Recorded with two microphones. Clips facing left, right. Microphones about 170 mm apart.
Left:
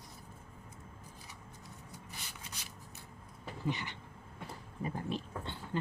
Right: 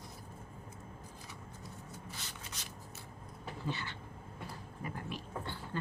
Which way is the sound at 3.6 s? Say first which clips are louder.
Left 3 dB; 15° left (ahead or behind).